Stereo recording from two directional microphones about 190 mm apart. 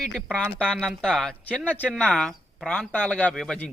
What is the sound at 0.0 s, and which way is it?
Speech, centre (ahead or behind).